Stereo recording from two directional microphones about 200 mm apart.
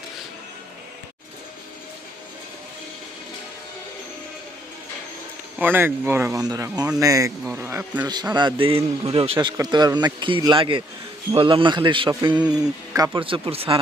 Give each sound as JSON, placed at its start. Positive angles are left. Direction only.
{"t": 5.5, "sound": "speech", "side_deg": -10}
{"t": 8.0, "sound": "speech", "side_deg": -20}
{"t": 12.4, "sound": "speech", "side_deg": -5}
{"t": 13.0, "sound": "speech", "side_deg": -25}